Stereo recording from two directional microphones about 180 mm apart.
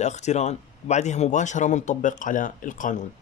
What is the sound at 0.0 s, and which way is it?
Speech, 40° left (ahead or behind).